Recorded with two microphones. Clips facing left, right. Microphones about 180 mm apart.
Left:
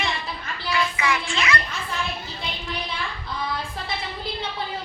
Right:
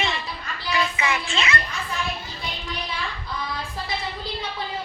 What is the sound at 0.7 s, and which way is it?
Child singing, 20° right (ahead or behind).